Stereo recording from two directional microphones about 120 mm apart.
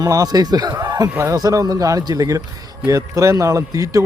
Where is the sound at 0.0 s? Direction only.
30° right (ahead or behind).